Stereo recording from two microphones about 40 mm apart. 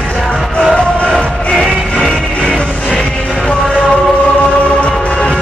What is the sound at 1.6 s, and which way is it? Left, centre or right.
Music, left.